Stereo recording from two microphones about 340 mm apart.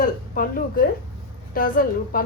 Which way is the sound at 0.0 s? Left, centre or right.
Left.